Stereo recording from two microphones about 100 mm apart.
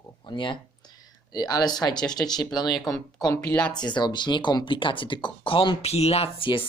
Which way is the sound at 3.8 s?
50° left (ahead or behind).